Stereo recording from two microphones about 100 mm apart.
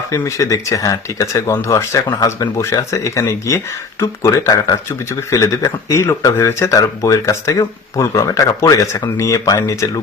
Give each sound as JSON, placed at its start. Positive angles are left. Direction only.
{"t": 0.1, "sound": "speech", "side_deg": 35}